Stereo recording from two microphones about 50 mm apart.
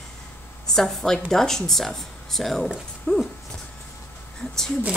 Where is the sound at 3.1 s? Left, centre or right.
Left.